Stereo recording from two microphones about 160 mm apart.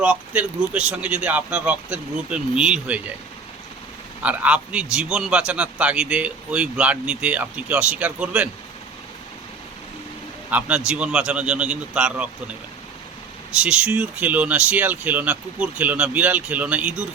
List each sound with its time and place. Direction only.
0.0 s a man's voice: 10° right (ahead or behind)
4.2 s a man's voice: 10° right (ahead or behind)
10.5 s a man's voice: 5° right (ahead or behind)
13.6 s a man's voice: 5° right (ahead or behind)